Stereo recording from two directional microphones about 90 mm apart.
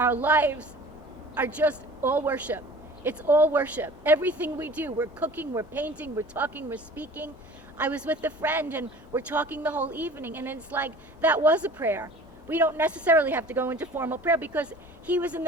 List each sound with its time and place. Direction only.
0.0 s speech: 20° right (ahead or behind)